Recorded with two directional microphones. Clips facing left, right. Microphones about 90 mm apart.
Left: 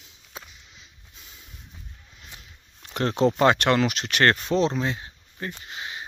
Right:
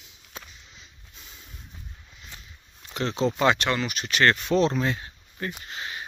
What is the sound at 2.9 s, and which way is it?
Speech, 55° left (ahead or behind).